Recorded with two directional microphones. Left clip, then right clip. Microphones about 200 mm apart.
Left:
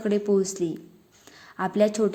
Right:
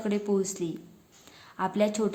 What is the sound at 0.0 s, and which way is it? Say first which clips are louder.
A woman's voice: left 5 dB; 15° left (ahead or behind).